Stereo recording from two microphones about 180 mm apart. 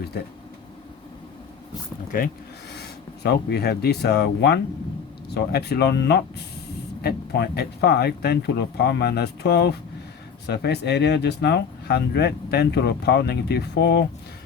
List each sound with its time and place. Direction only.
2.1 s speech: 50° left (ahead or behind)
2.7 s speech: 65° left (ahead or behind)